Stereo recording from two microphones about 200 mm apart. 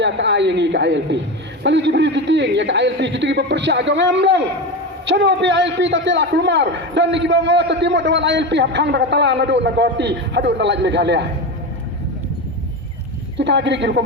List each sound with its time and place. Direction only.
0.0 s a man's voice: 60° right (ahead or behind)
13.3 s a man's voice: 60° right (ahead or behind)